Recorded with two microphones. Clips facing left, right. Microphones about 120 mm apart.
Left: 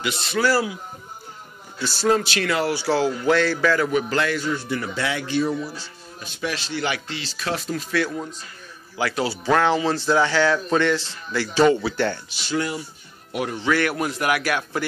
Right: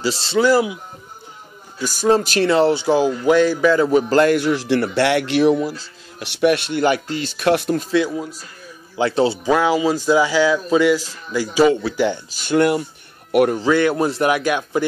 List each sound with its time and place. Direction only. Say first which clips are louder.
0.0 s a man's voice: right 5 dB; 35° right (ahead or behind)
0.4 s speech: right 6 dB; 20° right (ahead or behind)
1.8 s speech: right 3 dB; 15° right (ahead or behind)
2.4 s speech: right 7 dB; 25° right (ahead or behind)
3.9 s a man's voice: right 8 dB; 40° right (ahead or behind)
4.4 s a man's voice: right 8 dB; 90° right; by 7.7 s 65° right (ahead or behind)
8.1 s speech: right 4 dB; 5° right (ahead or behind)
8.9 s speech: right 7 dB; 25° right (ahead or behind)
9.4 s speech: right 3 dB; 10° right (ahead or behind)
12.3 s speech: right 9 dB; 50° right (ahead or behind)
13.7 s speech: right 6 dB; 25° right (ahead or behind)